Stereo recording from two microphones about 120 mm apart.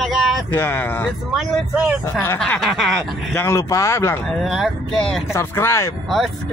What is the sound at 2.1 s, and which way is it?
Speech, 20° left (ahead or behind).